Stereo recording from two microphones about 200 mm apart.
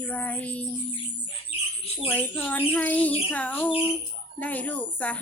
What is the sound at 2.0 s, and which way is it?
Speech, 10° left (ahead or behind).